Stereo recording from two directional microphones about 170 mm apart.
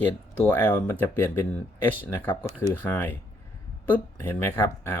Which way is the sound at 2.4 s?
15° right (ahead or behind).